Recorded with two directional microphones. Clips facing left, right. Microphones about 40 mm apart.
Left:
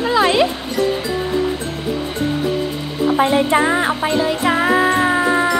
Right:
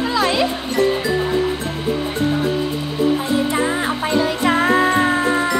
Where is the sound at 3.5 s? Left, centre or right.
Left.